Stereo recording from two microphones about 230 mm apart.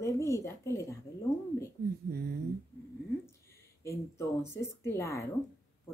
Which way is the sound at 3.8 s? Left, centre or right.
Centre.